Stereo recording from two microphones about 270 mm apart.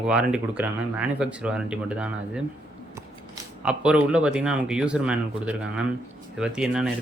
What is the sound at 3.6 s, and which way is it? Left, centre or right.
Speech, centre.